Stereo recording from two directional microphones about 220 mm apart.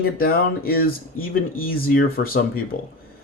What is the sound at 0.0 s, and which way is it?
Speech, 45° left (ahead or behind).